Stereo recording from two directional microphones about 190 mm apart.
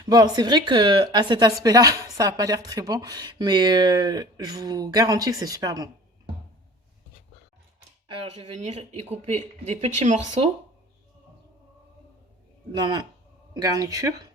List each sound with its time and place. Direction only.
0.1 s speech: 20° right (ahead or behind)
8.0 s speech: 30° right (ahead or behind)
12.7 s speech: 20° right (ahead or behind)